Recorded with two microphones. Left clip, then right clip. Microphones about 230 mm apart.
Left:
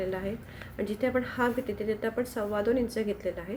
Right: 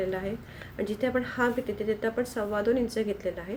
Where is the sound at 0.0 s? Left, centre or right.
Centre.